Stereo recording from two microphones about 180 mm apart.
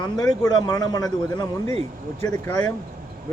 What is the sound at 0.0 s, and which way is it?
A man's voice, 20° left (ahead or behind).